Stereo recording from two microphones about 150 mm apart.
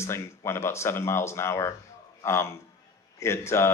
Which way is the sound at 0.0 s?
20° left (ahead or behind).